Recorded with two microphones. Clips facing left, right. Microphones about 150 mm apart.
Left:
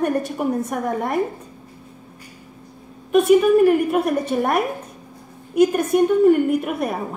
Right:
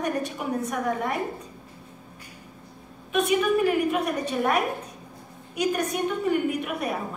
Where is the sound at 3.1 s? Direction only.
45° left (ahead or behind).